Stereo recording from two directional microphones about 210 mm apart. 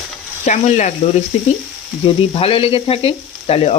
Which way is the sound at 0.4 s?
35° left (ahead or behind).